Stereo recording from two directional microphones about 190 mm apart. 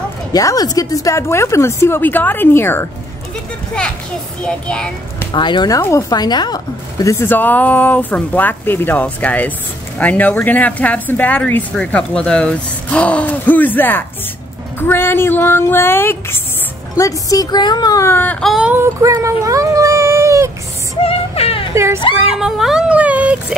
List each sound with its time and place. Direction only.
0.3 s speech: 20° left (ahead or behind)
4.4 s a child's voice: 5° left (ahead or behind)
5.3 s speech: 25° left (ahead or behind); by 20.5 s 15° right (ahead or behind)
21.0 s music: 30° left (ahead or behind)
21.7 s speech: 15° right (ahead or behind)
22.4 s speech: 5° right (ahead or behind)